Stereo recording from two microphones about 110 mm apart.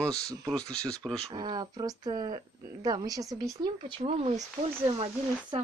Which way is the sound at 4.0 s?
75° right (ahead or behind).